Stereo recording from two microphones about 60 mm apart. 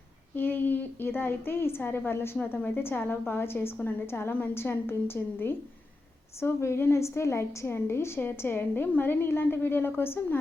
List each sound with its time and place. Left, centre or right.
0.3 s a woman's voice: left